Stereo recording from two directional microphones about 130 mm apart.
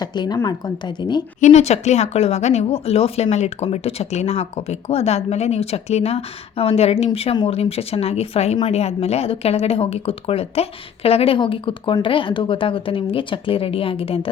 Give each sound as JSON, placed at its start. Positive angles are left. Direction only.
{"t": 0.0, "sound": "speech", "side_deg": 30}
{"t": 1.4, "sound": "a woman's voice", "side_deg": 60}